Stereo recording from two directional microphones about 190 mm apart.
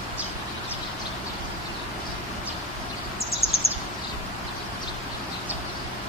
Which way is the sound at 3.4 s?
30° left (ahead or behind).